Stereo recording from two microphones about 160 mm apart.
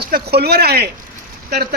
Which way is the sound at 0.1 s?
80° right.